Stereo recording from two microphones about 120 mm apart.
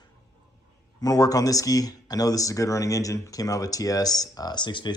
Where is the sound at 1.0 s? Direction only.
30° left (ahead or behind).